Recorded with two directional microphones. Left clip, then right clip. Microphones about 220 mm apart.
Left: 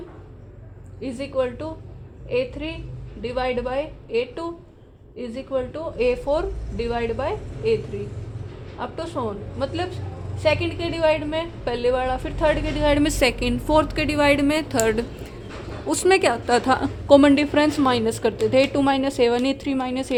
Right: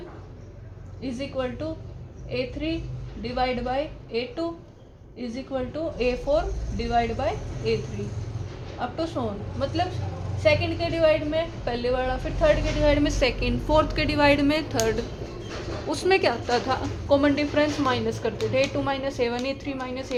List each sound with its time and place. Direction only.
1.0 s a woman's voice: 40° left (ahead or behind)
8.8 s a woman's voice: 35° left (ahead or behind)
13.7 s a woman's voice: 25° left (ahead or behind)
14.8 s a woman's voice: 35° left (ahead or behind); by 20.1 s 50° left (ahead or behind)